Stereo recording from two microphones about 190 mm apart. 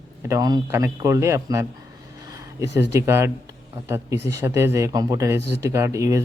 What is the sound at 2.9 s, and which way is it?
Speech, 15° right (ahead or behind).